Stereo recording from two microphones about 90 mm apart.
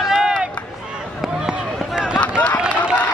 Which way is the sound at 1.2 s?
5° right (ahead or behind).